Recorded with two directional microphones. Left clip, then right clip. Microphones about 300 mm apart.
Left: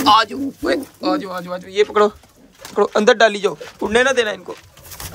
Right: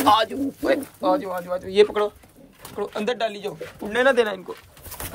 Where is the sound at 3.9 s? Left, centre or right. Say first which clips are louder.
Left 3 dB; centre.